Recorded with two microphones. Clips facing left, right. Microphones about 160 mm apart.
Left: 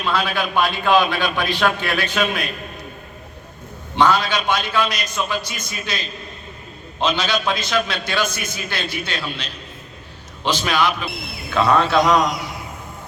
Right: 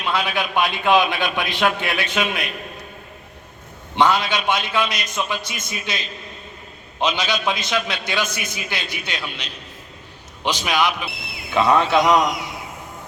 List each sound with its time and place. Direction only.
0.0 s a man's voice: 20° right (ahead or behind)
3.9 s a man's voice: 20° right (ahead or behind)